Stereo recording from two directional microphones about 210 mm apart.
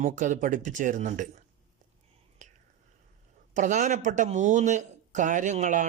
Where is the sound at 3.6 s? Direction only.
35° right (ahead or behind).